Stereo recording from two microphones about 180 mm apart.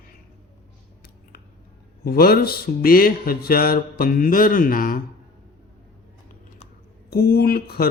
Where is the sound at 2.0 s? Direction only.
55° left (ahead or behind).